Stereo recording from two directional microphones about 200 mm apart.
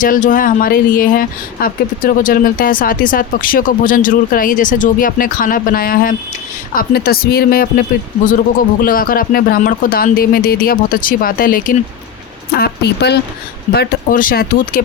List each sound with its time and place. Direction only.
0.0 s speech: 40° left (ahead or behind)
13.7 s speech: 45° left (ahead or behind)